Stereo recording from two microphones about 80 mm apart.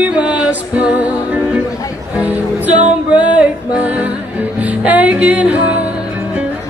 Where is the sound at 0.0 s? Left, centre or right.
Centre.